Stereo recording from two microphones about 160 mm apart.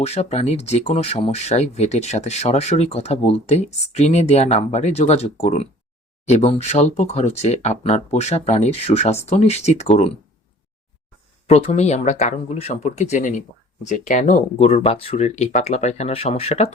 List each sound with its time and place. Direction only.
0.0 s speech: 40° left (ahead or behind)
11.4 s speech: 40° left (ahead or behind)